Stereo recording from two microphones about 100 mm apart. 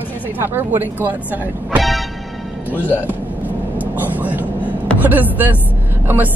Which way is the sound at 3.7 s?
20° right (ahead or behind).